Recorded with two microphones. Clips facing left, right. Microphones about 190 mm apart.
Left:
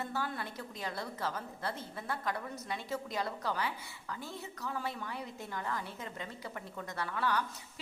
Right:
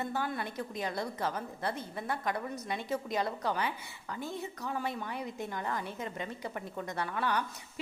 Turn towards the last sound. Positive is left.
turn(degrees=-20)  # may be behind; listen again after turning